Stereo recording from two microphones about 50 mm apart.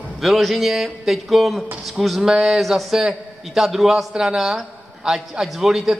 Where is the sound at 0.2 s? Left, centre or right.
Centre.